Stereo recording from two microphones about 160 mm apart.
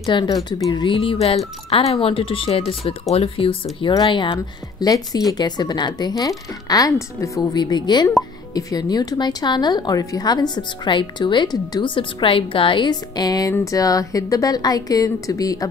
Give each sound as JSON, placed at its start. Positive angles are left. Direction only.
{"t": 0.0, "sound": "speech", "side_deg": 30}